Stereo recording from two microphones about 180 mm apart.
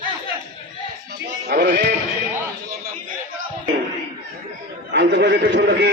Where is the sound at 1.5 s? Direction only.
55° right (ahead or behind).